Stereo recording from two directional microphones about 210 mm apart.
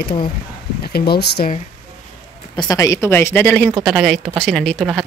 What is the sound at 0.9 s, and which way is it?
Speech, 50° left (ahead or behind).